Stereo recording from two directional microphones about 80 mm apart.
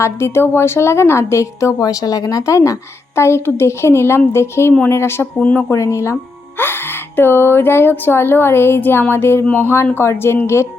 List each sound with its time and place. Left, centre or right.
0.0 s a woman's voice: left
5.4 s speech: centre
5.7 s a woman's voice: left